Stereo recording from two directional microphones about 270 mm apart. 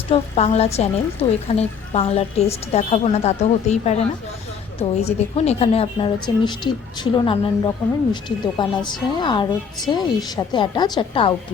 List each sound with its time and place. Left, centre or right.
0.1 s a woman's voice: left